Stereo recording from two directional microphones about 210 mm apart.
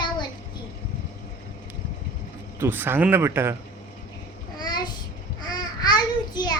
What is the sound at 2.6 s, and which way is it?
Speech, 10° right (ahead or behind).